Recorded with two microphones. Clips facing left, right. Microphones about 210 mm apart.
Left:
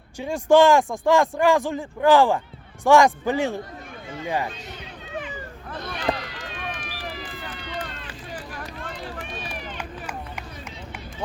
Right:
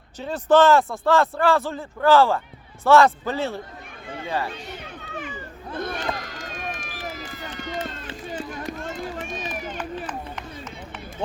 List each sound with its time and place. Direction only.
0.2 s speech: 10° left (ahead or behind)
5.7 s run: 50° right (ahead or behind)
7.8 s run: 25° right (ahead or behind)
9.2 s run: 45° right (ahead or behind)